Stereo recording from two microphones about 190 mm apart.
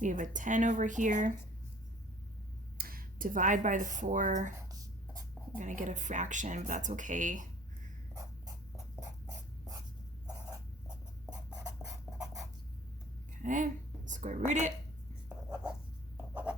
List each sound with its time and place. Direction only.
0.0 s speech: 40° right (ahead or behind)
2.7 s speech: 50° right (ahead or behind)
5.5 s speech: 40° right (ahead or behind)
8.1 s dog: 20° right (ahead or behind)
11.3 s a sound: 20° right (ahead or behind)
13.4 s a woman's voice: 40° right (ahead or behind)
15.3 s writing: 15° right (ahead or behind)